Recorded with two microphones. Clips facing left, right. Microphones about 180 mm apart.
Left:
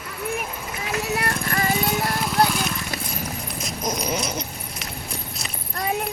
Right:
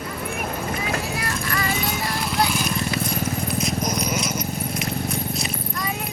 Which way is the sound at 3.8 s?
30° left (ahead or behind).